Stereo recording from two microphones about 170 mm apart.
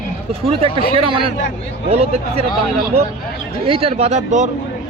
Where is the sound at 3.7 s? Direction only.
35° right (ahead or behind).